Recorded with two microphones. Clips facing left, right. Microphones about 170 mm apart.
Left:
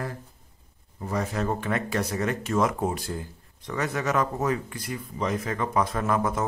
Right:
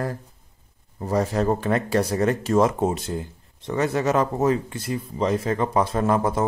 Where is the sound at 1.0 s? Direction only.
35° right (ahead or behind).